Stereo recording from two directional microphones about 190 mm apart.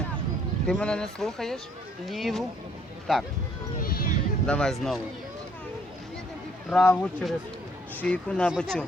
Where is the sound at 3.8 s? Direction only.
50° left (ahead or behind).